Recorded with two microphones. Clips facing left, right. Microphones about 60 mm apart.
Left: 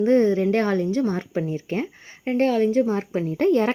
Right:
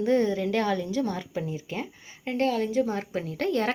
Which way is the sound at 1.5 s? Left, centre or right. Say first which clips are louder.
Left 7 dB; left.